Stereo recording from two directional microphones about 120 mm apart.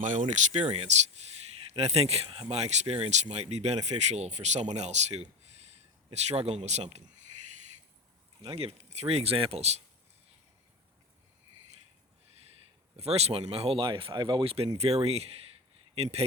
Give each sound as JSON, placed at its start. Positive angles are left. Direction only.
{"t": 0.0, "sound": "speech", "side_deg": -90}
{"t": 0.7, "sound": "speech", "side_deg": -65}
{"t": 8.5, "sound": "speech", "side_deg": -60}
{"t": 13.0, "sound": "speech", "side_deg": -60}
{"t": 14.8, "sound": "speech", "side_deg": -60}